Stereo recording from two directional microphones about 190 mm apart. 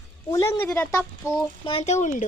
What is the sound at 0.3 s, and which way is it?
Speech, 15° left (ahead or behind).